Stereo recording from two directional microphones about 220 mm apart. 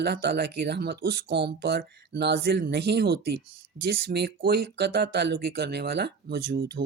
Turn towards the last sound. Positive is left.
turn(degrees=-45)  # may be behind; listen again after turning